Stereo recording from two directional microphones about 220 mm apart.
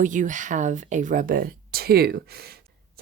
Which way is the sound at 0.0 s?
35° right (ahead or behind).